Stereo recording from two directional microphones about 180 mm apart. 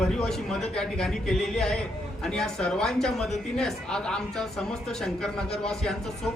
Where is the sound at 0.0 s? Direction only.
Centre (ahead or behind).